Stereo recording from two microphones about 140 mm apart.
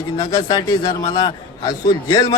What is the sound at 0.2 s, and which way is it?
A man's voice, 30° left (ahead or behind).